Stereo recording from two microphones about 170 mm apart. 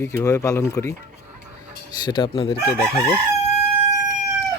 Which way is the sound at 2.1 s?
30° left (ahead or behind).